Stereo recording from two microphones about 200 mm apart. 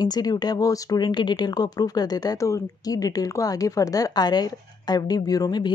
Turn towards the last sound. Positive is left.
turn(degrees=20)  # may be behind; listen again after turning